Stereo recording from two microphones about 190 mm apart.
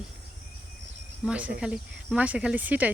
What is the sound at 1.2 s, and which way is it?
Speech, 5° right (ahead or behind).